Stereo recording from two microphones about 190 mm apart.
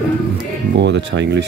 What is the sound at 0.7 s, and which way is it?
Speech, 70° right (ahead or behind).